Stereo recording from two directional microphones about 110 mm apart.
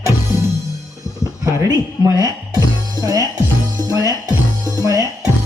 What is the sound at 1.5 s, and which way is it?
Speech, 35° right (ahead or behind).